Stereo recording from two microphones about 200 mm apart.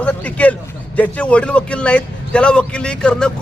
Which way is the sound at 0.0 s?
5° left (ahead or behind).